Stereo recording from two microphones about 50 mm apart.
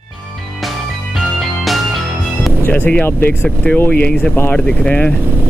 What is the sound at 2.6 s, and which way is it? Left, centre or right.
Speech, left.